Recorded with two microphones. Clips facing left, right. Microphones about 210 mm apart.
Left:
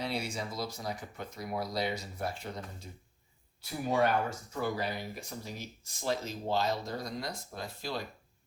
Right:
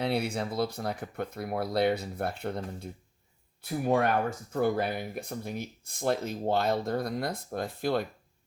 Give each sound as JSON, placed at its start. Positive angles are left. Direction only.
{"t": 0.0, "sound": "speech", "side_deg": -60}